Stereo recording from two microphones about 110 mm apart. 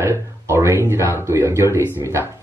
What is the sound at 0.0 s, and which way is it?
Speech, 25° right (ahead or behind).